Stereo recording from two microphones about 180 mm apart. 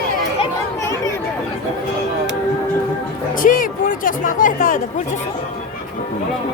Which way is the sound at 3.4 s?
50° left (ahead or behind).